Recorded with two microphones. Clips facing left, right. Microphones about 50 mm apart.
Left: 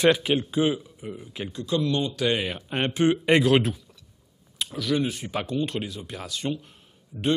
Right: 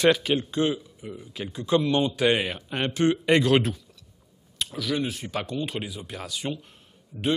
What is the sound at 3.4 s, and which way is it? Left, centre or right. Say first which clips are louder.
A man's voice: left 1 dB; centre.